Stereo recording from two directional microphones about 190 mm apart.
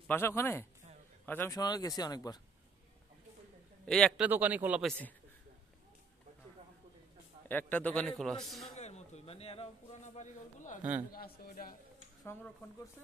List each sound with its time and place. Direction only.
0.1 s speech: 15° left (ahead or behind)
3.8 s a man's voice: 5° left (ahead or behind)
4.2 s speech: 10° right (ahead or behind)
7.4 s a man's voice: 10° left (ahead or behind)
8.7 s a sound: 35° left (ahead or behind)
10.8 s speech: 10° right (ahead or behind)
11.1 s a man's voice: 55° left (ahead or behind)